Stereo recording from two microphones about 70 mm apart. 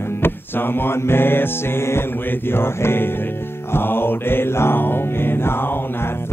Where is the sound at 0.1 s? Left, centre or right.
Left.